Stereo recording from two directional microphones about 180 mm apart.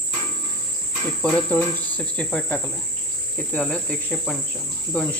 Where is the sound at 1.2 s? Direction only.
5° left (ahead or behind).